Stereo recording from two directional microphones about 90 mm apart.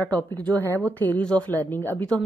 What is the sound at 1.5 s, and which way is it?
Speech, 25° left (ahead or behind).